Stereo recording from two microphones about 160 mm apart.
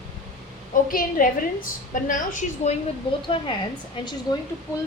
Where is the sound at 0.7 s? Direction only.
60° left (ahead or behind).